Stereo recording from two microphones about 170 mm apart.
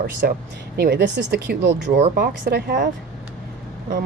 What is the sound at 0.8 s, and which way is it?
Speech, 85° right.